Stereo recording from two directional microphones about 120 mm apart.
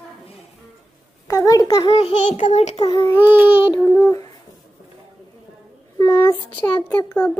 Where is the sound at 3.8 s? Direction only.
15° left (ahead or behind).